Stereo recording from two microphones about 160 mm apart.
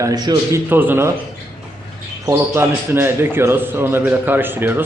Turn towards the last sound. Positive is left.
turn(degrees=-10)  # may be behind; listen again after turning